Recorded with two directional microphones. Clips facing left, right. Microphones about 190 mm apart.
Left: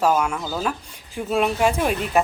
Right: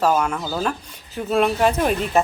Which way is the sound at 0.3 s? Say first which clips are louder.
Right 2 dB; centre (ahead or behind).